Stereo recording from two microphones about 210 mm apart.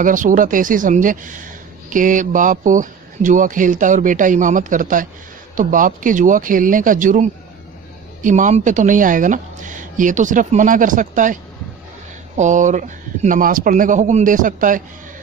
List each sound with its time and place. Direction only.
0.0 s speech: 40° right (ahead or behind)
12.4 s speech: 35° right (ahead or behind)